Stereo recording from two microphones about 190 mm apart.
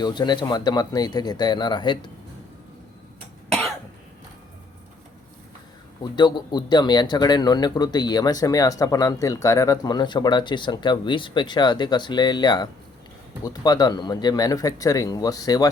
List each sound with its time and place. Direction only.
0.0 s speech: 25° left (ahead or behind)
6.0 s speech: 20° left (ahead or behind)